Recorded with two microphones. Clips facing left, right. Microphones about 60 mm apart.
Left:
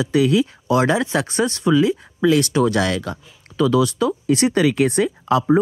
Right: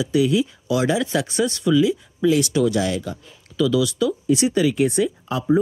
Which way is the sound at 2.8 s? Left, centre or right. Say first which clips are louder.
Left 2 dB; left.